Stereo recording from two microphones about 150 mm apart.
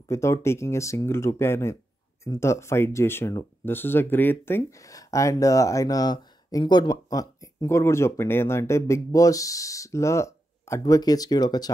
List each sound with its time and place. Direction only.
0.1 s speech: 20° left (ahead or behind)